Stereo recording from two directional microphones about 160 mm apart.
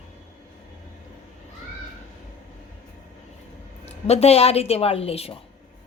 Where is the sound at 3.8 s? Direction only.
40° left (ahead or behind).